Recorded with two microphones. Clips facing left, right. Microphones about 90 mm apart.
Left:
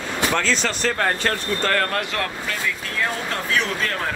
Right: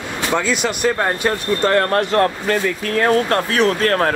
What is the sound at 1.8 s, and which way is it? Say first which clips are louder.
Speech: right 9 dB; 40° right (ahead or behind).